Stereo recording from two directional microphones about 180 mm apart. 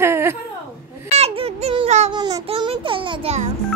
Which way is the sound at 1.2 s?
35° right (ahead or behind).